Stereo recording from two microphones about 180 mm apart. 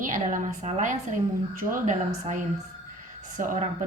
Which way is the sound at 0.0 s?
45° right (ahead or behind).